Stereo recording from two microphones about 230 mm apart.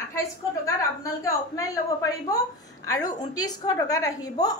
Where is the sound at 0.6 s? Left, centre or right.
Centre.